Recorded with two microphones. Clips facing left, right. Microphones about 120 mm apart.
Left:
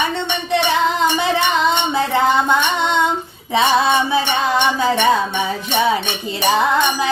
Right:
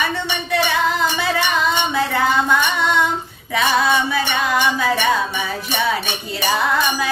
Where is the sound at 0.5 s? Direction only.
20° left (ahead or behind).